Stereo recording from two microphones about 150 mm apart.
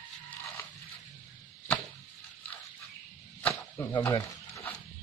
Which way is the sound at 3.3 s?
15° left (ahead or behind).